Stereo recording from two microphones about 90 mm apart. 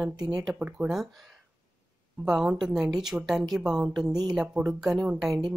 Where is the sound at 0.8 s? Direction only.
5° right (ahead or behind).